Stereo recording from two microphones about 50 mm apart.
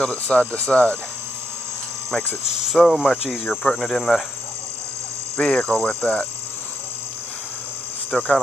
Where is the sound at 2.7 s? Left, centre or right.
Centre.